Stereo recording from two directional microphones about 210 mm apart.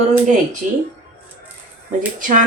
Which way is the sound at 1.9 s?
40° right (ahead or behind).